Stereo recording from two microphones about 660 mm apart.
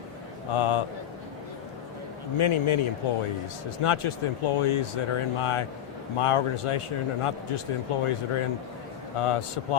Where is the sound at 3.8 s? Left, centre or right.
Left.